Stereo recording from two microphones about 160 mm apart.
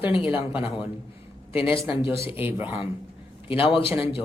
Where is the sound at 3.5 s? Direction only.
35° left (ahead or behind).